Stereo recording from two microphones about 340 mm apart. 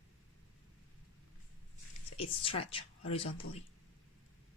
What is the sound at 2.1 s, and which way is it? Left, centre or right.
Speech, centre.